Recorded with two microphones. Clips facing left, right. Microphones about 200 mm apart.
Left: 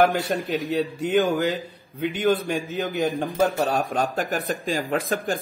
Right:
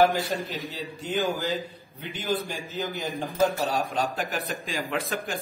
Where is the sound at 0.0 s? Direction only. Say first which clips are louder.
Left 2 dB; 60° left (ahead or behind).